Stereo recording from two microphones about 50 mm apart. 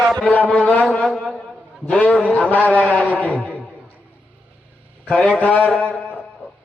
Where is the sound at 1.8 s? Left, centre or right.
Left.